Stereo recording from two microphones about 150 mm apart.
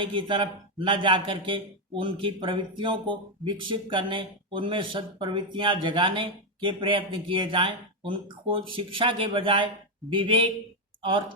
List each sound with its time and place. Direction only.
0.0 s a man's voice: 35° right (ahead or behind)